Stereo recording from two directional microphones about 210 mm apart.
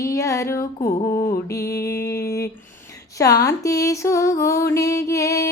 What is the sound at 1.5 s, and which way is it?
Music, 15° left (ahead or behind).